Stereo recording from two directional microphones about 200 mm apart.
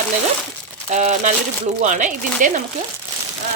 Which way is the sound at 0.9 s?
35° right (ahead or behind).